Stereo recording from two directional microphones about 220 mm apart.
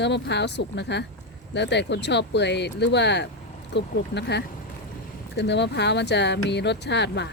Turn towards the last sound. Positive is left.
turn(degrees=50)  # may be behind; listen again after turning